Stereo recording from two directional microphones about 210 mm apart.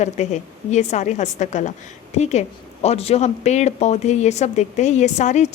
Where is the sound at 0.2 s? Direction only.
35° left (ahead or behind).